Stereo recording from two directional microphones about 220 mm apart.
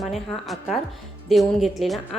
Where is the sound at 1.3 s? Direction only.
Centre (ahead or behind).